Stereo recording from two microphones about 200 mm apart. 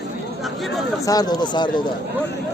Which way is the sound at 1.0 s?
20° left (ahead or behind).